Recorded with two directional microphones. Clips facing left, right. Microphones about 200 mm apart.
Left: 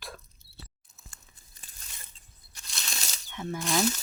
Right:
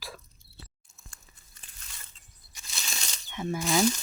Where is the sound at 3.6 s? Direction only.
5° right (ahead or behind).